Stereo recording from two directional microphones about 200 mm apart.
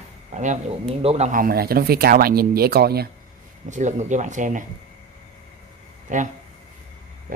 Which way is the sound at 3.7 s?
35° right (ahead or behind).